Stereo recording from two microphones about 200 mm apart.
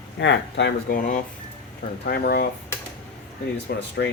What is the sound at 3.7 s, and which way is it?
Speech, 55° left (ahead or behind).